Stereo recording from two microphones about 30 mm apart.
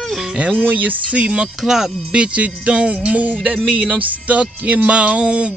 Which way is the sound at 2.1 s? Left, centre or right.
Right.